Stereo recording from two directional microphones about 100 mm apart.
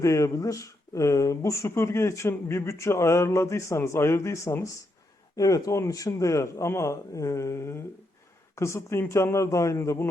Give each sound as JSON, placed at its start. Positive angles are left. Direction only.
{"t": 0.0, "sound": "a man's voice", "side_deg": 30}